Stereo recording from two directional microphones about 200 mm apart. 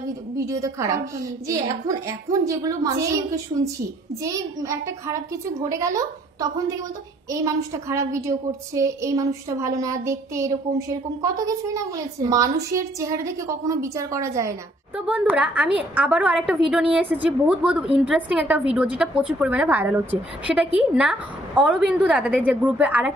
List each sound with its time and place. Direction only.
0.4 s a woman's voice: 15° right (ahead or behind)
4.2 s a woman's voice: 15° right (ahead or behind)